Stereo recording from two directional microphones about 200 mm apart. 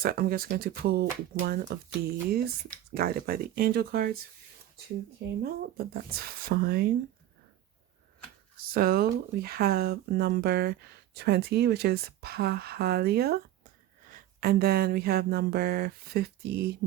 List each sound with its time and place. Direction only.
0.0 s speech: 50° right (ahead or behind)
5.4 s speech: 50° right (ahead or behind)
8.7 s speech: 50° right (ahead or behind)